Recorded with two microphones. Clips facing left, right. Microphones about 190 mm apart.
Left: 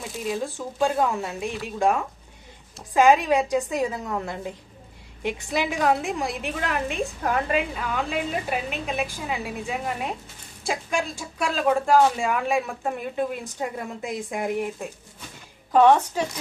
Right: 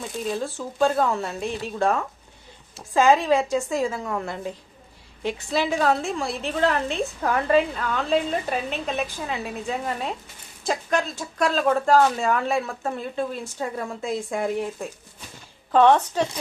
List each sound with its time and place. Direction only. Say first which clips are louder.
0.0 s speech: right 1 dB; centre (ahead or behind)
0.8 s speech: right 2 dB; 15° left (ahead or behind)
15.7 s speech: even; 10° left (ahead or behind)